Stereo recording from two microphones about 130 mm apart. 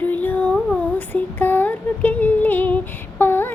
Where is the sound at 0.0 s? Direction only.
15° left (ahead or behind).